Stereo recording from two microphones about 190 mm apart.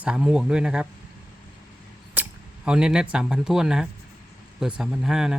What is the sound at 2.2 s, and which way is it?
Speech, 5° right (ahead or behind).